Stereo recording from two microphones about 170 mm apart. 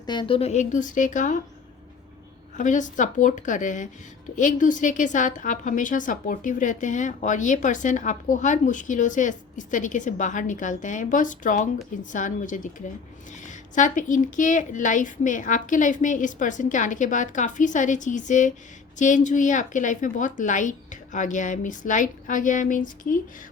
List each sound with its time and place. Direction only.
0.0 s a woman's voice: 25° left (ahead or behind); by 1.4 s 50° left (ahead or behind)
2.6 s a woman's voice: 45° left (ahead or behind)